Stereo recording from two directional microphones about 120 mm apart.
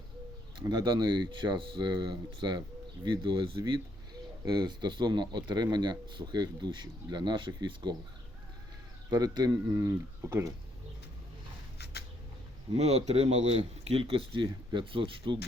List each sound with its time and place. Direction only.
0.6 s speech: 35° right (ahead or behind)
9.0 s speech: 35° right (ahead or behind)
12.7 s speech: 65° right (ahead or behind); by 15.4 s 45° right (ahead or behind)